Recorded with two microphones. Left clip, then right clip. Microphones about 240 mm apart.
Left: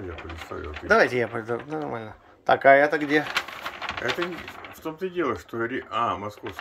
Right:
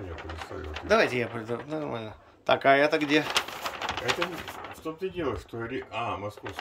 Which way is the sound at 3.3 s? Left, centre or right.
Right.